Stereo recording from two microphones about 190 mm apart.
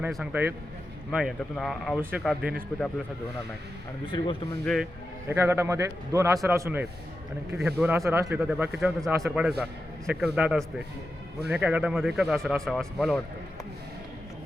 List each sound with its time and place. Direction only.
0.0 s a man's voice: 5° right (ahead or behind)
2.0 s a man's voice: 10° right (ahead or behind)
4.0 s speech: 25° left (ahead or behind)
4.6 s a man's voice: centre (ahead or behind)
5.3 s a man's voice: 15° right (ahead or behind); by 13.2 s centre (ahead or behind)